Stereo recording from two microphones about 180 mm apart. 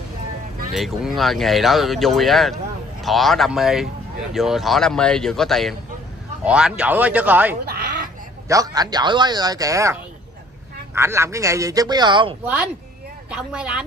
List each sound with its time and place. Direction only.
0.7 s a man's voice: centre (ahead or behind)
7.6 s quack: 55° right (ahead or behind)
8.5 s speech: 20° right (ahead or behind)
11.0 s a man's voice: 15° right (ahead or behind)
13.3 s speech: 5° right (ahead or behind)